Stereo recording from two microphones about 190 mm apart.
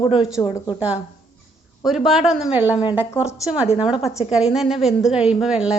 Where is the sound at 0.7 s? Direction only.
5° right (ahead or behind).